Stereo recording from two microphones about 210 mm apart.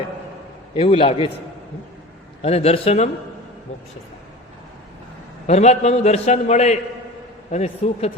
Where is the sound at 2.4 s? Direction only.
30° left (ahead or behind).